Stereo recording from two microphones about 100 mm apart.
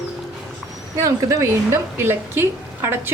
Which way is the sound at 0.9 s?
30° right (ahead or behind).